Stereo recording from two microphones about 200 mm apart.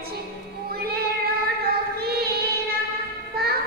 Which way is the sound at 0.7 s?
50° right (ahead or behind).